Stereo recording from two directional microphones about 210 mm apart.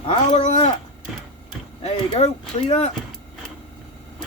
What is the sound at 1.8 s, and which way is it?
Speech, 30° left (ahead or behind).